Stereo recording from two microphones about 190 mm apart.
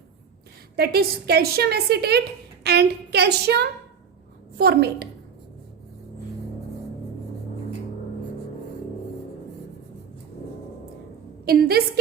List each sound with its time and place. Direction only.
0.8 s a woman's voice: 55° right (ahead or behind)
11.4 s a woman's voice: 55° right (ahead or behind)